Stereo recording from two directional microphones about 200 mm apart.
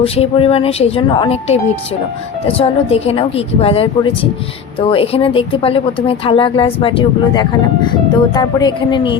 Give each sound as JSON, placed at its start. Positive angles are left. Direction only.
{"t": 0.0, "sound": "speech", "side_deg": 30}